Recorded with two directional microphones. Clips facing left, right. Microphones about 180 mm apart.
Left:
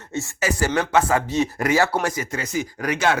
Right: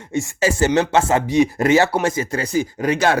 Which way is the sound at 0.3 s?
25° right (ahead or behind).